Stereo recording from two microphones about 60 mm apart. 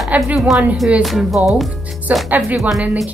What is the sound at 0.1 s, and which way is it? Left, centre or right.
Speech, right.